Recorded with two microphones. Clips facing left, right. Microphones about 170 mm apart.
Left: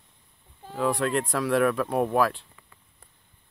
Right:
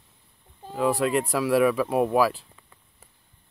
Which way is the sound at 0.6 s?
10° right (ahead or behind).